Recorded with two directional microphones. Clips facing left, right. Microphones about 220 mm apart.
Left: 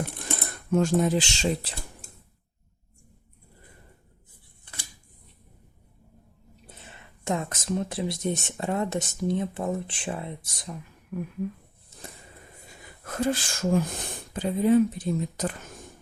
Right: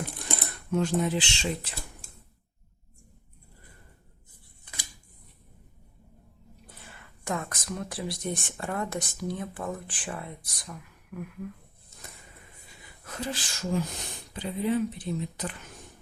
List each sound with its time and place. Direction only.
0.7 s speech: 45° left (ahead or behind)
6.7 s speech: 20° left (ahead or behind)
12.6 s speech: 50° left (ahead or behind)